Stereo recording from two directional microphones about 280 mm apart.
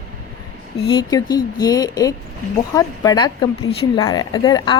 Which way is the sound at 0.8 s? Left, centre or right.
Centre.